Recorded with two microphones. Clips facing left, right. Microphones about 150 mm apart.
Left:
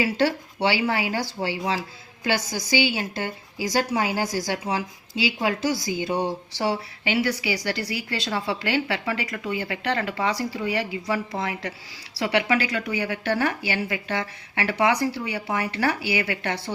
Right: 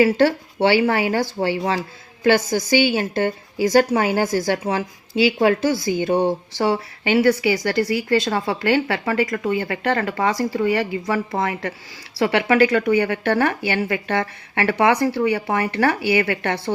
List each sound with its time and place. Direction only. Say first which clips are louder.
0.0 s a woman's voice: right 7 dB; 50° right (ahead or behind)